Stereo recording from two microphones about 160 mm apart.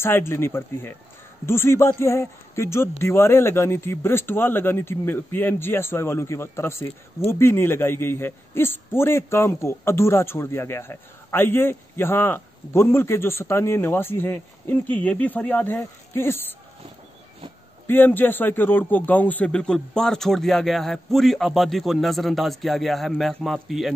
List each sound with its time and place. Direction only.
0.0 s a man's voice: 15° left (ahead or behind)
17.8 s speech: 10° left (ahead or behind)